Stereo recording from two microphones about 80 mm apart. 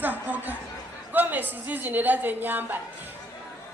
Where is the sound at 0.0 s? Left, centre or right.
Right.